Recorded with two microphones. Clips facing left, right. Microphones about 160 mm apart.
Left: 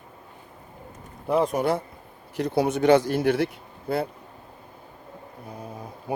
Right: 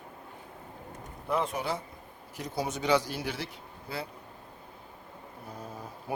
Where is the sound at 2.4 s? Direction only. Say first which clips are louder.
Left 11 dB; 65° left (ahead or behind).